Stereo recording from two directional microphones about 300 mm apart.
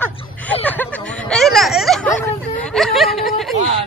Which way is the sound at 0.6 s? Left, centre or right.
Centre.